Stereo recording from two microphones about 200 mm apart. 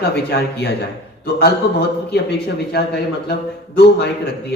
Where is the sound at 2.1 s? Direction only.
55° left (ahead or behind).